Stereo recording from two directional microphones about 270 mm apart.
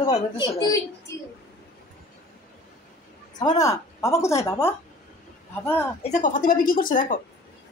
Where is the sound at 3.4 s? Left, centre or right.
Centre.